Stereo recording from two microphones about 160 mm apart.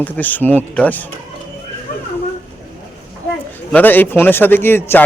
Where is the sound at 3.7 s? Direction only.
10° left (ahead or behind).